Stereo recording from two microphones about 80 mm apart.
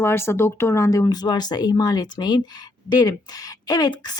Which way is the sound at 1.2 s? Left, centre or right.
Left.